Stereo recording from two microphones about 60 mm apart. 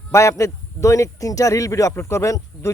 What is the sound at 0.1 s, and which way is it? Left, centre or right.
Speech, left.